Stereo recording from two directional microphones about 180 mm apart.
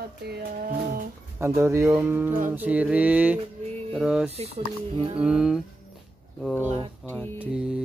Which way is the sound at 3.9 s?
Centre (ahead or behind).